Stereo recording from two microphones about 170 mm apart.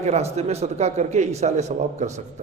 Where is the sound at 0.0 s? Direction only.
40° right (ahead or behind).